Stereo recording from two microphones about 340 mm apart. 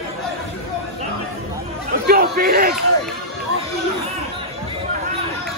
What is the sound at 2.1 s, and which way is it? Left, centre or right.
Speech, right.